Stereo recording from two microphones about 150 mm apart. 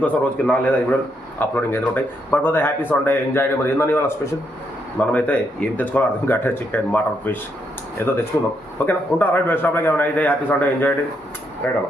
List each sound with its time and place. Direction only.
0.0 s speech: 10° left (ahead or behind)